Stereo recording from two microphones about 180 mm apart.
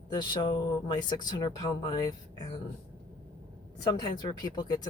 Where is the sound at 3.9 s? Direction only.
25° left (ahead or behind).